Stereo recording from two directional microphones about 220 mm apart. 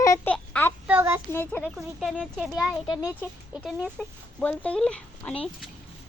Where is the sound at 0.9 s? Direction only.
10° right (ahead or behind).